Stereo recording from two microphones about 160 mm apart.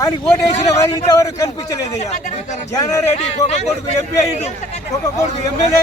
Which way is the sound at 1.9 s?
45° left (ahead or behind).